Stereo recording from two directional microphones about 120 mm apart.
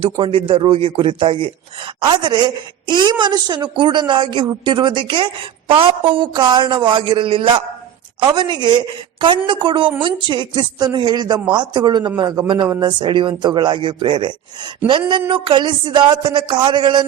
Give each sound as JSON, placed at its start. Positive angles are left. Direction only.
{"t": 0.0, "sound": "a woman's voice", "side_deg": -50}